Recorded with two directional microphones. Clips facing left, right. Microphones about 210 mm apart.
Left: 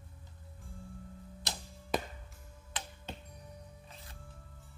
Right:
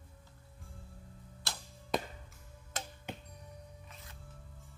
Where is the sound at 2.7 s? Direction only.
45° right (ahead or behind).